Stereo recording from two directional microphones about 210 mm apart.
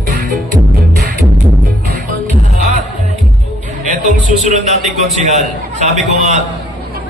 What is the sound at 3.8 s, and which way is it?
Music, 35° right (ahead or behind).